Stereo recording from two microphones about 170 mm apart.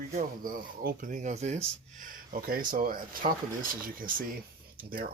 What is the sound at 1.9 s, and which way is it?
Speech, 55° right (ahead or behind).